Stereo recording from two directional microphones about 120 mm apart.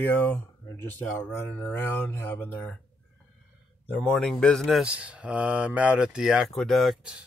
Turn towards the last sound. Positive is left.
turn(degrees=-5)  # may be behind; listen again after turning